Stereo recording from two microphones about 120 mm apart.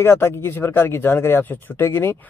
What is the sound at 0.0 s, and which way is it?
Speech, 20° left (ahead or behind).